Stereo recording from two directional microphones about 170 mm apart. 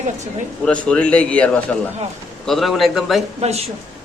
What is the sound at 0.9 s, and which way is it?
A man's voice, 5° left (ahead or behind).